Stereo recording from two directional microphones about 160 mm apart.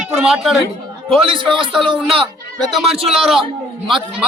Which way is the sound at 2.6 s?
Centre (ahead or behind).